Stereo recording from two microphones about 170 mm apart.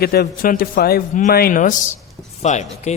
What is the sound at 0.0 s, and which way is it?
A man's voice, 65° left (ahead or behind).